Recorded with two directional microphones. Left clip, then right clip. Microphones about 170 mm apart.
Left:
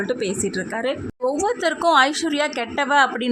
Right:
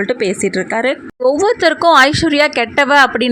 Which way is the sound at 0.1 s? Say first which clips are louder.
Right 8 dB; 20° right (ahead or behind).